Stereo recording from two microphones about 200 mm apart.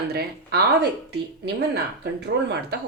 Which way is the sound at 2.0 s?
55° right (ahead or behind).